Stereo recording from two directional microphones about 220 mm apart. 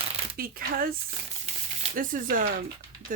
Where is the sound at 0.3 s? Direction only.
40° right (ahead or behind).